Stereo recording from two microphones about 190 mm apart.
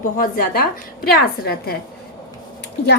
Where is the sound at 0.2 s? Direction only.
50° left (ahead or behind).